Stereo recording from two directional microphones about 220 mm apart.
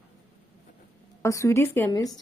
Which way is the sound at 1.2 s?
15° left (ahead or behind).